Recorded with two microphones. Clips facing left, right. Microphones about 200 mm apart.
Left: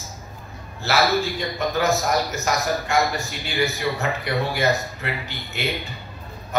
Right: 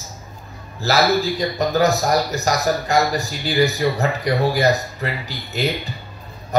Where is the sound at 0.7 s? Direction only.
35° right (ahead or behind).